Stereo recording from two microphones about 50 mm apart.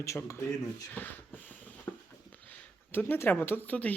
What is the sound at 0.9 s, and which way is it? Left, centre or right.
Speech, left.